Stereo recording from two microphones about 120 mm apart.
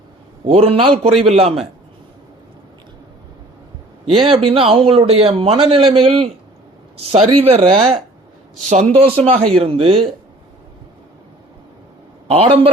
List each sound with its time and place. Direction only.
0.4 s a man's voice: 55° right (ahead or behind)
4.3 s a man's voice: 50° right (ahead or behind)
8.5 s a man's voice: 75° right (ahead or behind); by 10.1 s 50° right (ahead or behind)
12.3 s a man's voice: 55° right (ahead or behind)